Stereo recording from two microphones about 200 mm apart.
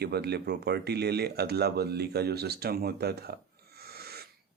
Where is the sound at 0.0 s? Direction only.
55° right (ahead or behind).